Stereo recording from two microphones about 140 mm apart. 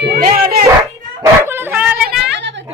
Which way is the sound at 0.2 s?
90° right.